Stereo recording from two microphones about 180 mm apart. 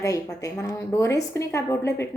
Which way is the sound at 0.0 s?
20° left (ahead or behind).